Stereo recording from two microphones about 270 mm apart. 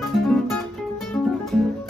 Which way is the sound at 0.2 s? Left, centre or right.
Centre.